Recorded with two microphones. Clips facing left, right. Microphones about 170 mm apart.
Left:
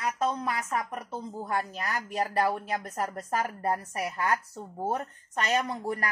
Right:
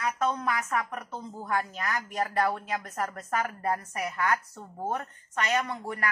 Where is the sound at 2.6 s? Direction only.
35° left (ahead or behind).